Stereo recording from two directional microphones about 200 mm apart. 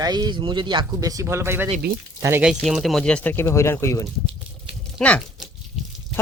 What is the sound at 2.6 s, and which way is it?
Speech, centre (ahead or behind).